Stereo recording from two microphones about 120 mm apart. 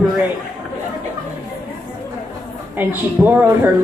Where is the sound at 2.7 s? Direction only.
15° right (ahead or behind).